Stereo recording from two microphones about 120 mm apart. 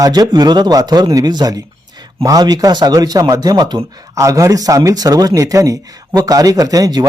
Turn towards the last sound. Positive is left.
turn(degrees=-30)  # may be behind; listen again after turning